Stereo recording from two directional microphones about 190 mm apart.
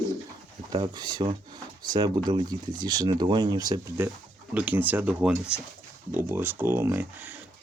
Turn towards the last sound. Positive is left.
turn(degrees=-10)  # may be behind; listen again after turning